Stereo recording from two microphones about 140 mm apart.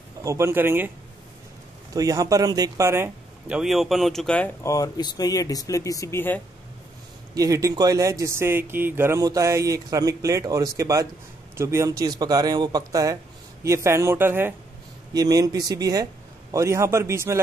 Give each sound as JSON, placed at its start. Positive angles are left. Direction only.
{"t": 0.2, "sound": "speech", "side_deg": -20}
{"t": 2.0, "sound": "speech", "side_deg": -25}
{"t": 3.5, "sound": "speech", "side_deg": 0}
{"t": 4.6, "sound": "speech", "side_deg": 25}
{"t": 7.3, "sound": "speech", "side_deg": -25}
{"t": 15.1, "sound": "speech", "side_deg": -25}